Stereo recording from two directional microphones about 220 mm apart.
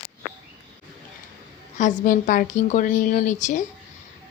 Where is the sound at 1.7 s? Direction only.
35° left (ahead or behind).